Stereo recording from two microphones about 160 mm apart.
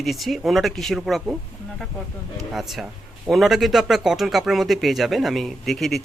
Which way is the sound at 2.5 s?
Centre (ahead or behind).